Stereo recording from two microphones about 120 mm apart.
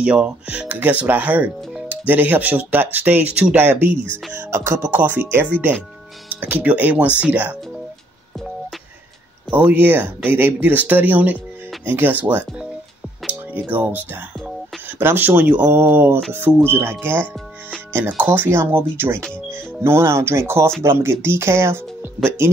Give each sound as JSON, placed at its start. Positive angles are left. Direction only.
{"t": 0.0, "sound": "speech", "side_deg": -10}
{"t": 9.5, "sound": "speech", "side_deg": -15}
{"t": 17.9, "sound": "speech", "side_deg": -15}